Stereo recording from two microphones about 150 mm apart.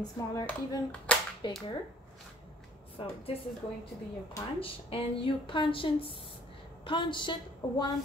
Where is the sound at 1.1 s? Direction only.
10° left (ahead or behind).